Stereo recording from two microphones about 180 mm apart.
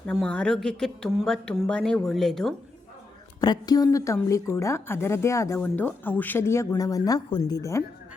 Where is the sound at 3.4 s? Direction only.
20° left (ahead or behind).